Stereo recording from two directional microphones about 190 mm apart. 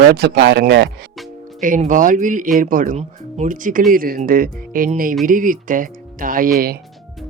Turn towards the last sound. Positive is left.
turn(degrees=-50)  # may be behind; listen again after turning